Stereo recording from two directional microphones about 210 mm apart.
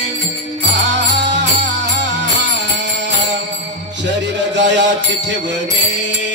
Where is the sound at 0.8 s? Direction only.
55° right (ahead or behind).